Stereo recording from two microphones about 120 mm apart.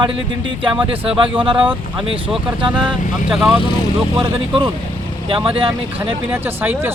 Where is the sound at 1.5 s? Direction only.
10° right (ahead or behind).